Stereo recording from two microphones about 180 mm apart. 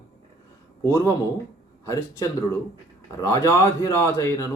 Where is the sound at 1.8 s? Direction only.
15° left (ahead or behind).